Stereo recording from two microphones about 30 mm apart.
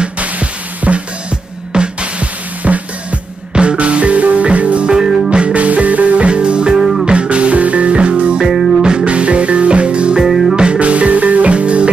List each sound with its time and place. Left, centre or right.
0.2 s music: right
1.7 s music: right
2.1 s music: right
6.2 s music: right
6.8 s music: centre
7.1 s music: right
8.4 s music: right
8.8 s music: right
10.2 s music: centre
10.5 s music: right
10.8 s music: right